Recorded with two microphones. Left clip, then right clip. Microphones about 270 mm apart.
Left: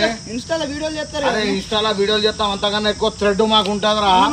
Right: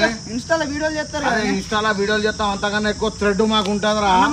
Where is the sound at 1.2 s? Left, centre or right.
Centre.